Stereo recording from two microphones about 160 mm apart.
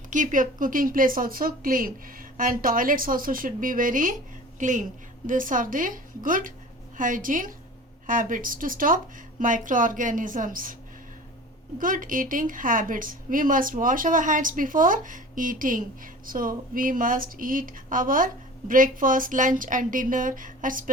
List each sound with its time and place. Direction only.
0.1 s speech: 55° right (ahead or behind)
11.8 s speech: 60° right (ahead or behind)